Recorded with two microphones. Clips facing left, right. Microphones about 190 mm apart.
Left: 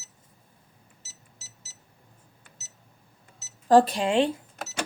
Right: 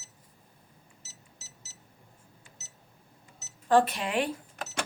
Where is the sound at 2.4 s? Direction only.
60° left (ahead or behind).